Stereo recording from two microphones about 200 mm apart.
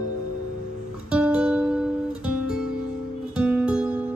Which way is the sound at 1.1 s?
5° right (ahead or behind).